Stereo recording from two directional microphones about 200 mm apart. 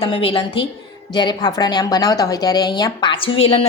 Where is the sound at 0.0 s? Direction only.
30° left (ahead or behind).